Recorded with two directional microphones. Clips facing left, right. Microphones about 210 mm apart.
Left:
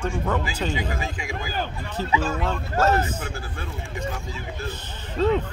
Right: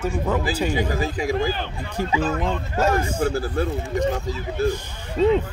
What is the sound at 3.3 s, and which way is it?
Speech, 40° right (ahead or behind).